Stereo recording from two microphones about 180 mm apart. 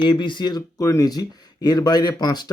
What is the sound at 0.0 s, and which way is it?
Speech, 25° left (ahead or behind).